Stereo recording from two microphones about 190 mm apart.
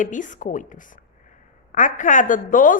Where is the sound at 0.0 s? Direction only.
40° left (ahead or behind).